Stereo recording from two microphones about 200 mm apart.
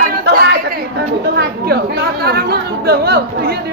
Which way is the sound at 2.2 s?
55° right (ahead or behind).